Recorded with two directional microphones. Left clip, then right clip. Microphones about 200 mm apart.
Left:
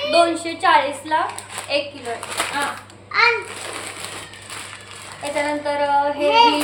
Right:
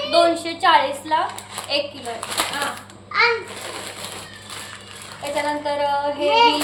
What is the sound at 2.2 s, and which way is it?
Speech, 25° right (ahead or behind).